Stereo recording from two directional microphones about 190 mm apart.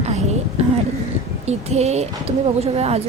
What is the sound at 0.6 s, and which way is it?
A woman's voice, 35° right (ahead or behind).